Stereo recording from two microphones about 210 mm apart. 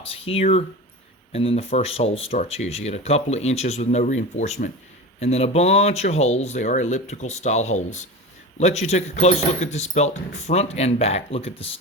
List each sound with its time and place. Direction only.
0.0 s speech: 25° left (ahead or behind)